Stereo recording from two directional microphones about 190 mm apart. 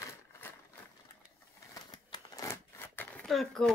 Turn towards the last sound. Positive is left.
turn(degrees=0)  # may be behind; listen again after turning